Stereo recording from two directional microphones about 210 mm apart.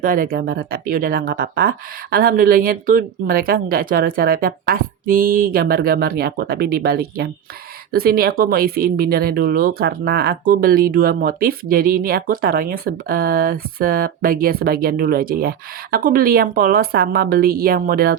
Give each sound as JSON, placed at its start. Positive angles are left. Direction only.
{"t": 0.0, "sound": "speech", "side_deg": -40}